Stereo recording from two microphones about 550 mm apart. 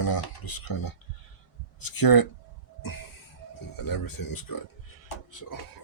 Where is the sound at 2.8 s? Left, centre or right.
Left.